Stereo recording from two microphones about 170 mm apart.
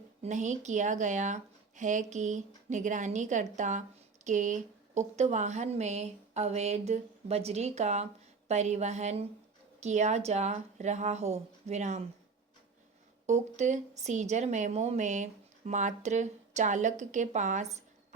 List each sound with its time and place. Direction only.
0.2 s a woman's voice: 45° right (ahead or behind)
13.2 s speech: 45° right (ahead or behind)